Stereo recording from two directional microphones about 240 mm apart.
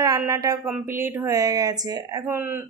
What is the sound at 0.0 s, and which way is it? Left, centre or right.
Speech, centre.